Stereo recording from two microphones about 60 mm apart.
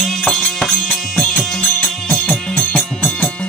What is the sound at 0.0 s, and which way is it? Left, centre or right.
Music, centre.